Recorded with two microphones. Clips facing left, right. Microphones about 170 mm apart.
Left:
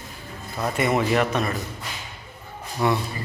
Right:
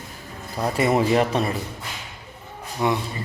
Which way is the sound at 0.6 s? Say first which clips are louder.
Right 2 dB; 35° right (ahead or behind).